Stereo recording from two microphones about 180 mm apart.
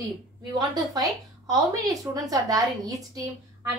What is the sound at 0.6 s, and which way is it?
Speech, 20° right (ahead or behind).